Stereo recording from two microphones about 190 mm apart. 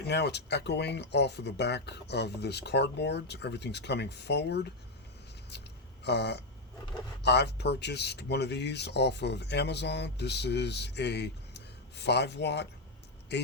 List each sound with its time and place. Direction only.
0.1 s speech: 60° left (ahead or behind)
6.1 s speech: 65° left (ahead or behind)